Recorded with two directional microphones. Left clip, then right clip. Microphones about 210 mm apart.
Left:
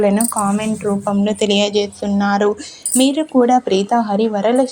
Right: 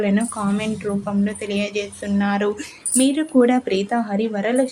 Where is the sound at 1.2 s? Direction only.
30° left (ahead or behind).